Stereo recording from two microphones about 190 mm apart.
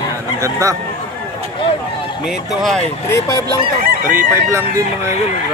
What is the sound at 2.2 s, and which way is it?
Speech, centre (ahead or behind).